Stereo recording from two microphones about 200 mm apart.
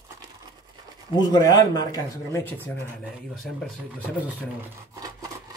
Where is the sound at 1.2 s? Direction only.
20° left (ahead or behind).